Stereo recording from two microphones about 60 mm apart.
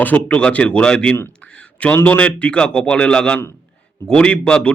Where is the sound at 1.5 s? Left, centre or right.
Left.